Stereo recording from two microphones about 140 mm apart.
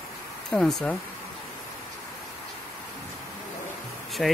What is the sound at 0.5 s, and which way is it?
Speech, 5° left (ahead or behind).